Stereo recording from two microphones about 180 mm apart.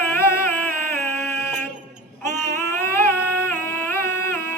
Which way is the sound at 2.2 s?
15° left (ahead or behind).